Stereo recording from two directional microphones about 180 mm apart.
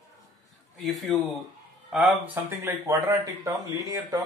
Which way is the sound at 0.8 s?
Centre (ahead or behind).